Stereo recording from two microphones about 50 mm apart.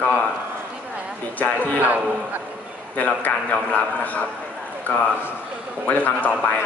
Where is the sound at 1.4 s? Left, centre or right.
Left.